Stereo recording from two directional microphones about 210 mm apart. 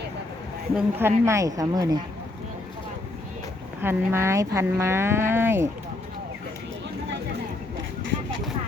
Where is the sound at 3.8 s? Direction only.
10° right (ahead or behind).